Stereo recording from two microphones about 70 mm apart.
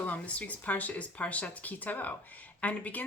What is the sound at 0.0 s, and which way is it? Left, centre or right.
Speech, left.